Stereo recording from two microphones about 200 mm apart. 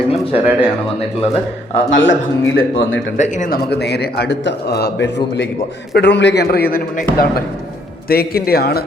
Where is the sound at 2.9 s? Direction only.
65° left (ahead or behind).